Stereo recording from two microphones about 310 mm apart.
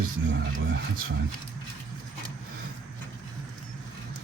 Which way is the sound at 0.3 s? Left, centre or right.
Right.